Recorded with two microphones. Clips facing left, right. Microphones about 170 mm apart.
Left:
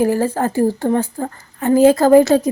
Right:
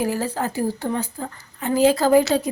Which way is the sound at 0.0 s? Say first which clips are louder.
Left 7 dB; 50° left (ahead or behind).